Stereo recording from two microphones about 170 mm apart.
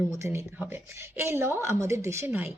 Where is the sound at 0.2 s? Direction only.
15° right (ahead or behind).